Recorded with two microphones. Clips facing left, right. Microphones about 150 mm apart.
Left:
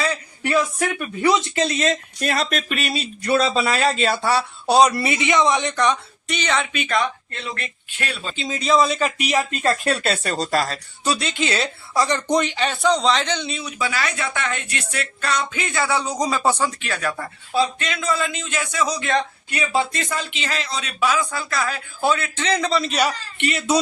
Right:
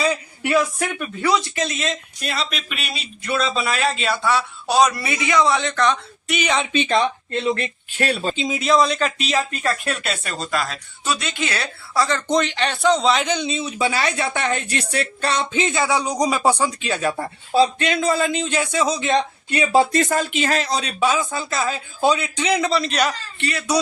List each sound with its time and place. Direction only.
0.0 s a sound: 10° right (ahead or behind)
1.2 s speech: 20° left (ahead or behind)
1.6 s speech: 40° left (ahead or behind); by 6.0 s 10° left (ahead or behind)
6.2 s speech: 10° right (ahead or behind)
6.7 s speech: 25° right (ahead or behind)
8.0 s speech: 40° right (ahead or behind)
8.4 s speech: 10° right (ahead or behind)
8.6 s a man's voice: centre (ahead or behind); by 9.6 s 15° left (ahead or behind)
9.6 s speech: 35° left (ahead or behind); by 23.1 s 5° left (ahead or behind)
23.4 s speech: 20° left (ahead or behind)